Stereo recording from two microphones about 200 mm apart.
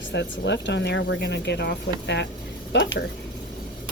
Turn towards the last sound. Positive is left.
turn(degrees=65)  # may be behind; listen again after turning